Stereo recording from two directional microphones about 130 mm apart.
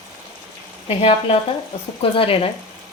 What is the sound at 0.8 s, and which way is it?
Speech, 50° left (ahead or behind).